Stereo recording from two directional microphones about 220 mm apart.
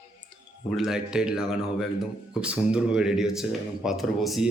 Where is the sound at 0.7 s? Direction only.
Centre (ahead or behind).